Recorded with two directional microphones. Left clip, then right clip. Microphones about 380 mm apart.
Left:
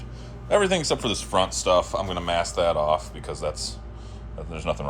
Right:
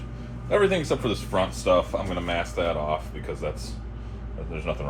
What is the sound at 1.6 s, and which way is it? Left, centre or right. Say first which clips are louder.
Speech: left 1 dB; left.